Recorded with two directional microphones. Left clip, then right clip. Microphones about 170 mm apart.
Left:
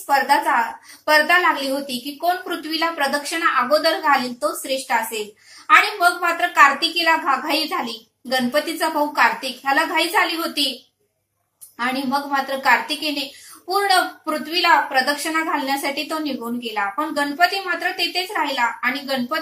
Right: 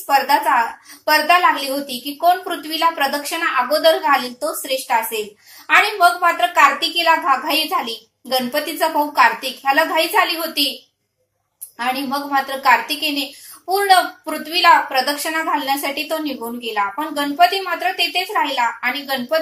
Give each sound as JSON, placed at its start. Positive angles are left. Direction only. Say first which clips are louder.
{"t": 0.0, "sound": "a woman's voice", "louder": "right 2 dB", "side_deg": -20}
{"t": 6.2, "sound": "a child's voice", "louder": "right 1 dB", "side_deg": -15}
{"t": 11.8, "sound": "a woman's voice", "louder": "right 1 dB", "side_deg": -20}